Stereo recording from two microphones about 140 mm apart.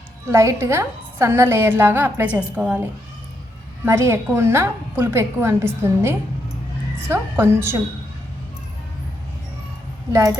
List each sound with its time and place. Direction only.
0.3 s a woman's voice: 20° right (ahead or behind)
10.1 s speech: 25° right (ahead or behind)